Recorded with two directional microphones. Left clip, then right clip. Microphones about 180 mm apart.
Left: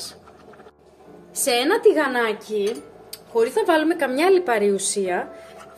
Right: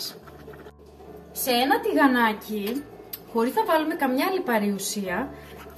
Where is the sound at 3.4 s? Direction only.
65° left (ahead or behind).